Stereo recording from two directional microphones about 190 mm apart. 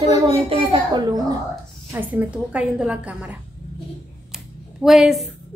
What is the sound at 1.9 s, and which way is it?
A woman's voice, 10° right (ahead or behind).